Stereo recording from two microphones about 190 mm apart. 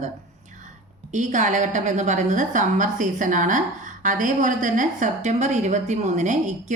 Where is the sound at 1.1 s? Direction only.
40° right (ahead or behind).